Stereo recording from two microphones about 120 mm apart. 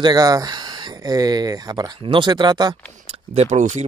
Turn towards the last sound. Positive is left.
turn(degrees=-80)